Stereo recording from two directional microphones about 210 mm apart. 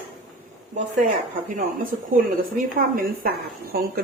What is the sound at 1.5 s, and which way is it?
Speech, 40° right (ahead or behind).